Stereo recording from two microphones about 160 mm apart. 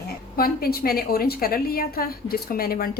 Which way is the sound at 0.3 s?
70° left (ahead or behind).